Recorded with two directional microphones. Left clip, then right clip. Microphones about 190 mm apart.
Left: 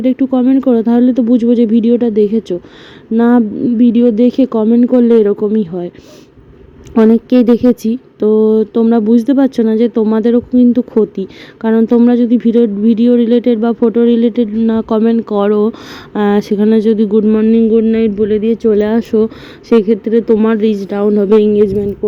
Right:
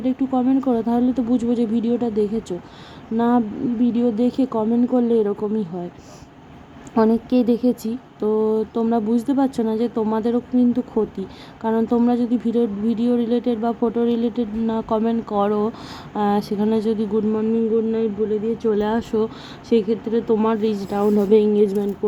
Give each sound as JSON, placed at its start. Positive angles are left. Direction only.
{"t": 0.0, "sound": "a woman's voice", "side_deg": 30}
{"t": 6.9, "sound": "a woman's voice", "side_deg": 30}